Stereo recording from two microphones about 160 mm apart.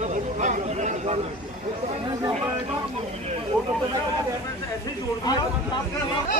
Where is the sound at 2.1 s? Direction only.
25° right (ahead or behind).